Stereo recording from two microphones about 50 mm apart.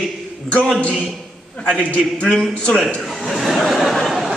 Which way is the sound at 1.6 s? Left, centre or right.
Centre.